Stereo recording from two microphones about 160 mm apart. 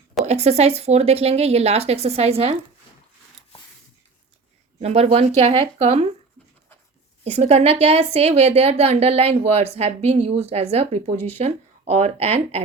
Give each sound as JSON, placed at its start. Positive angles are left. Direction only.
{"t": 0.3, "sound": "a woman's voice", "side_deg": -40}
{"t": 4.8, "sound": "a woman's voice", "side_deg": -40}
{"t": 7.3, "sound": "a woman's voice", "side_deg": -40}